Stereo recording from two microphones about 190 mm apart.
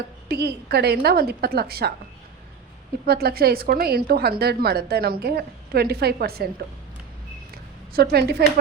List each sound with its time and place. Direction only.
0.3 s a woman's voice: 60° right (ahead or behind)
3.1 s a woman's voice: 55° right (ahead or behind)
7.5 s a sound: 55° right (ahead or behind)